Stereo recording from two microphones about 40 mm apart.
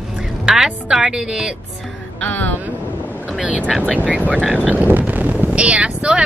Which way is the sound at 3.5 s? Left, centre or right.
Right.